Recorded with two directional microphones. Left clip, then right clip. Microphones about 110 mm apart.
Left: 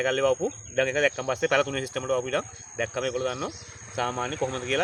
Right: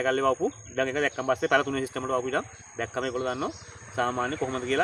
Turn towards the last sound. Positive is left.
turn(degrees=-25)  # may be behind; listen again after turning